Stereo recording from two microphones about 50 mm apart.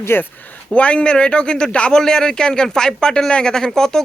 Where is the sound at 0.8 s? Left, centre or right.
Left.